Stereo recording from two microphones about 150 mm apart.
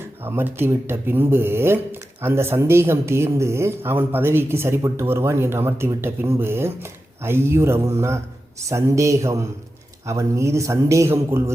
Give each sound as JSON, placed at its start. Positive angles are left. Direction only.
{"t": 0.0, "sound": "a man's voice", "side_deg": -15}